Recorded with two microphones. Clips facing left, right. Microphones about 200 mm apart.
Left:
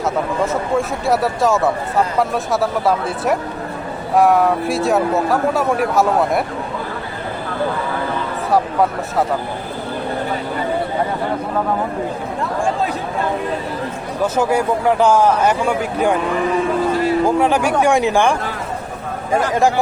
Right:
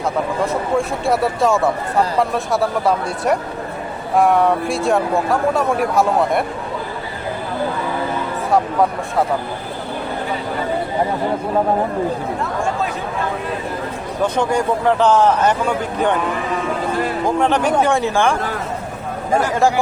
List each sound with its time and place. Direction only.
0.4 s speech: centre (ahead or behind)
14.3 s a man's voice: 10° left (ahead or behind)
17.2 s a man's voice: 10° left (ahead or behind)
19.4 s a man's voice: 15° left (ahead or behind)